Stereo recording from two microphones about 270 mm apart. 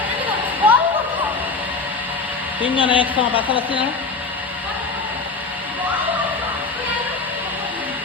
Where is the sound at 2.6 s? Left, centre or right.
Centre.